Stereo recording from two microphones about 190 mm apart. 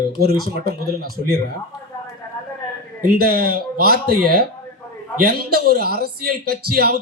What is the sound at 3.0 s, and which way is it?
Speech, 55° right (ahead or behind).